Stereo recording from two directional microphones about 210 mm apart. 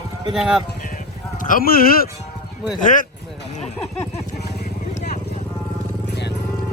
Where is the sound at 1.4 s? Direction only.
40° left (ahead or behind).